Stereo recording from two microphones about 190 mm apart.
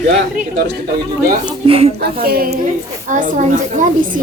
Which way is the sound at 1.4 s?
30° right (ahead or behind).